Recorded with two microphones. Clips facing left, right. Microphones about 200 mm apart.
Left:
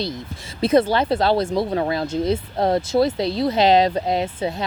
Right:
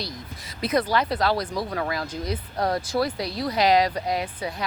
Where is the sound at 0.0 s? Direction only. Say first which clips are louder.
Left 7 dB; 25° left (ahead or behind).